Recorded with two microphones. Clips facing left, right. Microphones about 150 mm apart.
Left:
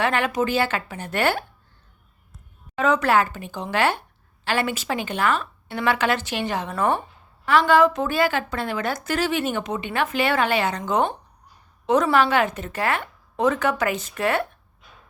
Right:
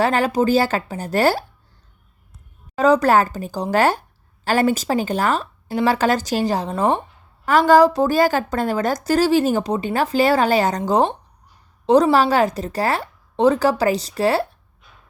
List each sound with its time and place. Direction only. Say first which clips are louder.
0.0 s a woman's voice: right 5 dB; 35° right (ahead or behind)
2.7 s a woman's voice: right 5 dB; 35° right (ahead or behind)
7.4 s a woman's voice: right 4 dB; 45° right (ahead or behind)